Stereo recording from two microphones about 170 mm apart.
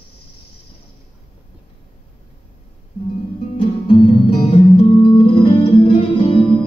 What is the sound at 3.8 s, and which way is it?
Music, 35° left (ahead or behind).